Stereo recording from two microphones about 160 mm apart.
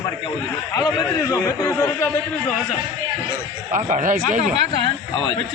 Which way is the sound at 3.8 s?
50° right (ahead or behind).